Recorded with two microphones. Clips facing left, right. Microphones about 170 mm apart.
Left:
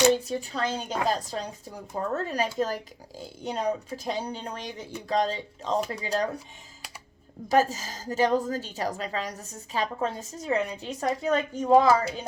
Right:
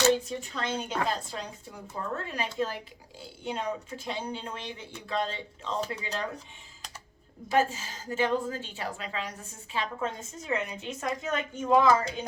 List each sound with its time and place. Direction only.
0.3 s a woman's voice: 35° left (ahead or behind)
7.4 s a woman's voice: 40° left (ahead or behind)